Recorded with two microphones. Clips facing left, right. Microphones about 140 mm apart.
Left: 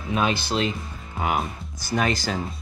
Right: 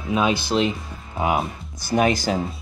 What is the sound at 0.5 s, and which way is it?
Speech, 15° right (ahead or behind).